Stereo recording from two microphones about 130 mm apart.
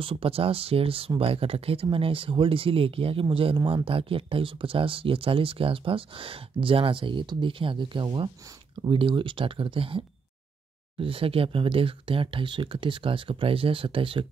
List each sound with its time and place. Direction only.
0.0 s speech: 45° right (ahead or behind)